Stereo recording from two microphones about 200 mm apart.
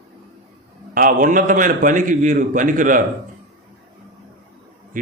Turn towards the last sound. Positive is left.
turn(degrees=-40)  # may be behind; listen again after turning